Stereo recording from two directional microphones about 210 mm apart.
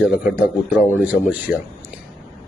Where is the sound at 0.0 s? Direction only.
5° right (ahead or behind).